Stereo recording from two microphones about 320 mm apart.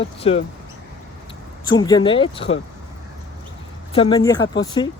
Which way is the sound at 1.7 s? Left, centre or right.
Centre.